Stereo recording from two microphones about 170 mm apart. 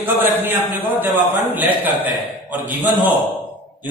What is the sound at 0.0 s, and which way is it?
A man's voice, 10° right (ahead or behind).